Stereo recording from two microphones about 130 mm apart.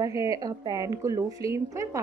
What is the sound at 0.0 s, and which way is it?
A woman's voice, 25° right (ahead or behind).